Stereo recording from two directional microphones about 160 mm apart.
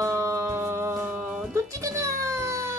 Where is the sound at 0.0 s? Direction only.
20° right (ahead or behind).